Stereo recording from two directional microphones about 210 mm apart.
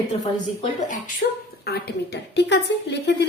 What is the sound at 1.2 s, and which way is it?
Speech, 45° left (ahead or behind).